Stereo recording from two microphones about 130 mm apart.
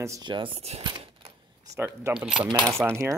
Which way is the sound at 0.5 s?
50° right (ahead or behind).